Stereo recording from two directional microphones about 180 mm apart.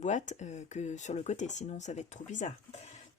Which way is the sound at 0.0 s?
40° left (ahead or behind).